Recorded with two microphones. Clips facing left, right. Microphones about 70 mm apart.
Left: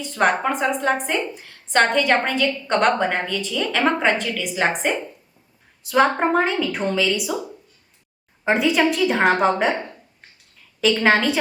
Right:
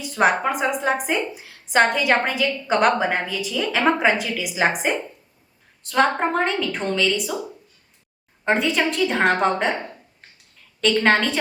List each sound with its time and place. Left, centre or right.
0.0 s a woman's voice: centre
5.8 s a woman's voice: centre
8.4 s a woman's voice: centre
10.8 s a woman's voice: centre